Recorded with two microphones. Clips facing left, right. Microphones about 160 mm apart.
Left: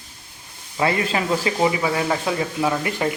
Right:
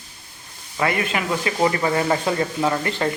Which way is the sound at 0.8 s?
30° left (ahead or behind).